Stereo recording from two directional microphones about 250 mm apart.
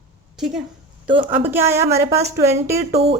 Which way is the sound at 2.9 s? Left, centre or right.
Right.